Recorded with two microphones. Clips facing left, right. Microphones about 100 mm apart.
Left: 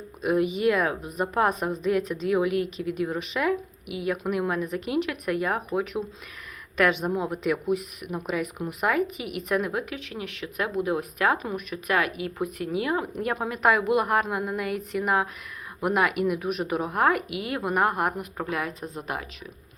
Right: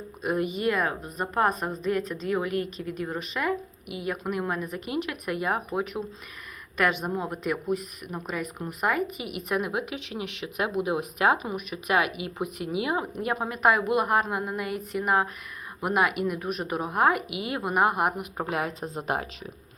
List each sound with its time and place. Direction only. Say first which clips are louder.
0.2 s a woman's voice: left 4 dB; centre (ahead or behind)
18.3 s speech: right 1 dB; 25° right (ahead or behind)